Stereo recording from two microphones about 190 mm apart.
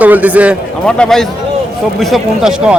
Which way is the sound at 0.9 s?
5° left (ahead or behind).